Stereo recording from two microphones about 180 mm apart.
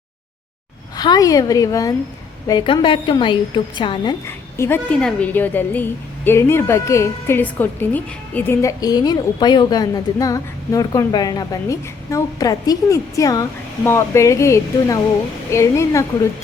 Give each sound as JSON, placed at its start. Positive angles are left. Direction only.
{"t": 0.9, "sound": "a woman's voice", "side_deg": 20}
{"t": 4.3, "sound": "a woman's voice", "side_deg": 15}